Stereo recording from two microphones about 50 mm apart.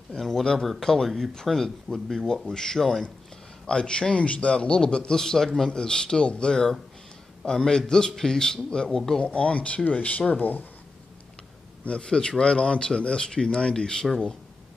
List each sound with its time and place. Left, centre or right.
0.2 s speech: centre
9.2 s speech: left
11.8 s speech: left